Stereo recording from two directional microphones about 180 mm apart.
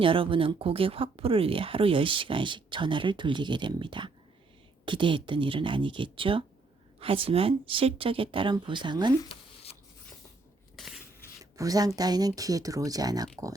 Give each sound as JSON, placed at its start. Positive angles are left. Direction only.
{"t": 0.0, "sound": "speech", "side_deg": -30}
{"t": 10.8, "sound": "a sound", "side_deg": 0}
{"t": 11.5, "sound": "speech", "side_deg": -20}